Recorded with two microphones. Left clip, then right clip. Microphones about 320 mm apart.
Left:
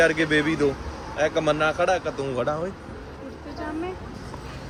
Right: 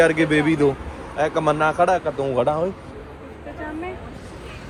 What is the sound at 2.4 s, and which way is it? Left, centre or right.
Speech, right.